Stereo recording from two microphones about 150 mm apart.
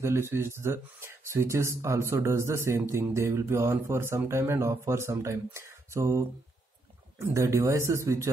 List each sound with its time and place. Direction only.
0.0 s speech: 15° right (ahead or behind)